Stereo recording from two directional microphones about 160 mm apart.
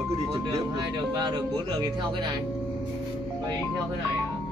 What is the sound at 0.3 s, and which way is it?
A man's voice, 25° right (ahead or behind).